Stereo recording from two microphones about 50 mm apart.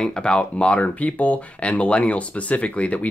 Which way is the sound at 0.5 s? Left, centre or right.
Left.